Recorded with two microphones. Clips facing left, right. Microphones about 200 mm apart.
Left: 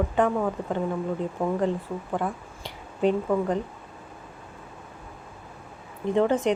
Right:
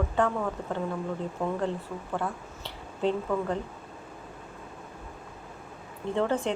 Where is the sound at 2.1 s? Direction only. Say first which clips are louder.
Left 3 dB; 15° left (ahead or behind).